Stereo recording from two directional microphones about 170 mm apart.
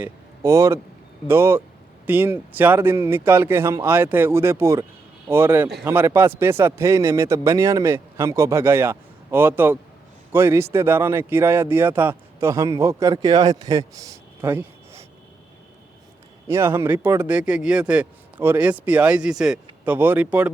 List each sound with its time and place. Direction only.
0.0 s speech: 15° right (ahead or behind)
16.5 s speech: 15° right (ahead or behind)